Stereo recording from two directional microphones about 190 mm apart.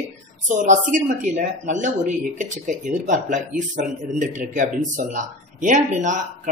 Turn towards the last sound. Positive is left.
turn(degrees=-40)  # may be behind; listen again after turning